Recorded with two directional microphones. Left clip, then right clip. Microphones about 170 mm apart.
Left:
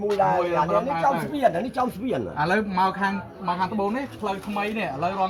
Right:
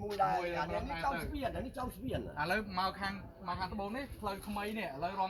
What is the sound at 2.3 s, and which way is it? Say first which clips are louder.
Speech: left 11 dB; 25° left (ahead or behind).